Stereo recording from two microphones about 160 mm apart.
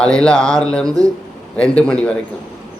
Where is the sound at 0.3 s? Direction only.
20° right (ahead or behind).